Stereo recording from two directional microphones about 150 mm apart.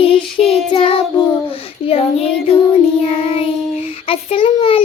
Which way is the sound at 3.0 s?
45° left (ahead or behind).